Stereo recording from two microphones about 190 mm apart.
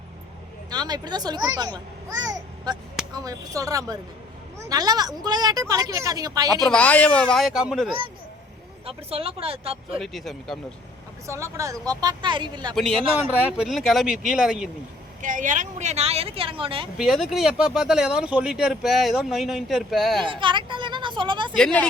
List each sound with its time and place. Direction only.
0.7 s a child's voice: 20° right (ahead or behind)
6.5 s speech: centre (ahead or behind)
8.9 s speech: 30° right (ahead or behind)
10.0 s speech: centre (ahead or behind)
11.3 s a child's voice: 15° right (ahead or behind)
12.7 s speech: centre (ahead or behind)
15.2 s speech: 40° right (ahead or behind)
17.0 s speech: centre (ahead or behind)
20.2 s a sound: 25° right (ahead or behind)
21.5 s speech: 5° left (ahead or behind)